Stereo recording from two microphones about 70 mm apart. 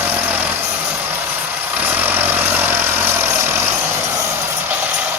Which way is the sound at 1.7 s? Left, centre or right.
Right.